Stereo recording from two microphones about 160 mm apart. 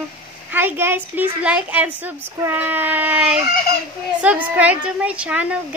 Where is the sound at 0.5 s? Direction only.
10° right (ahead or behind).